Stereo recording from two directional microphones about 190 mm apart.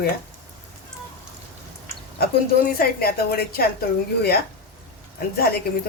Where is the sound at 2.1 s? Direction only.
55° left (ahead or behind).